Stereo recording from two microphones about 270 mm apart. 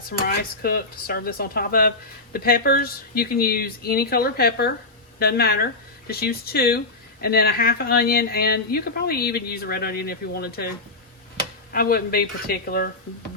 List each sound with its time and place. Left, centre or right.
0.6 s speech: left
11.7 s speech: left